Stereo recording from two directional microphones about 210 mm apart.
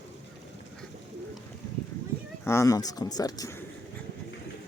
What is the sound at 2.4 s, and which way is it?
Speech, 15° left (ahead or behind).